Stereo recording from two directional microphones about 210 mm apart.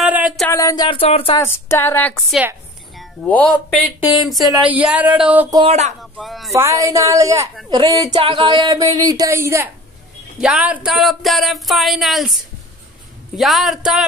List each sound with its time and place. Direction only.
0.0 s a sound: 5° right (ahead or behind)
0.5 s a sound: 15° left (ahead or behind)
1.4 s speech: 10° left (ahead or behind); by 5.6 s 10° right (ahead or behind)
5.6 s speech: 30° right (ahead or behind)
6.1 s speech: centre (ahead or behind)
6.5 s speech: 15° right (ahead or behind)
13.4 s speech: centre (ahead or behind)